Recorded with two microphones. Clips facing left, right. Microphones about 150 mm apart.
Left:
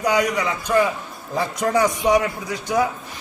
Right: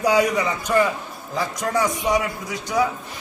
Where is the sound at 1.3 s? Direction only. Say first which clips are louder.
Left 3 dB; 65° left (ahead or behind).